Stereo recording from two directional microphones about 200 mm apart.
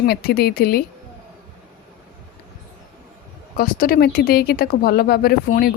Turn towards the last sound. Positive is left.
turn(degrees=50)  # may be behind; listen again after turning